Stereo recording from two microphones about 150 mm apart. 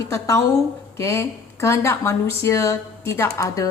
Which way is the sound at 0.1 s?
20° left (ahead or behind).